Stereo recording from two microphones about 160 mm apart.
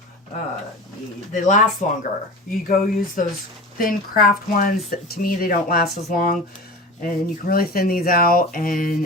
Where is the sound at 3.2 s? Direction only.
55° left (ahead or behind).